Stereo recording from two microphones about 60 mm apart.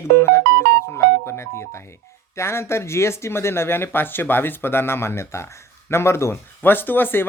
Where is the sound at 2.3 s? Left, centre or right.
Left.